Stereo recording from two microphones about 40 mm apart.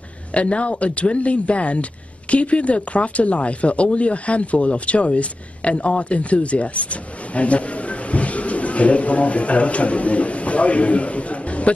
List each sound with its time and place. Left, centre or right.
0.3 s speech: left